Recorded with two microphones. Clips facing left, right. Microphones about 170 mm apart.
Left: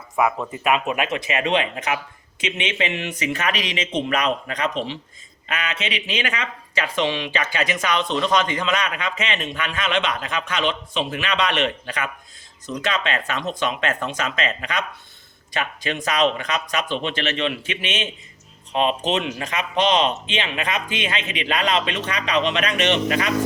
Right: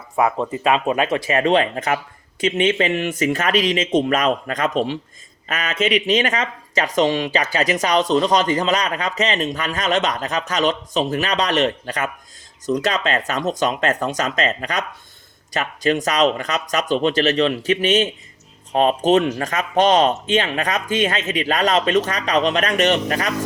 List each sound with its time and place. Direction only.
0.2 s speech: 30° right (ahead or behind)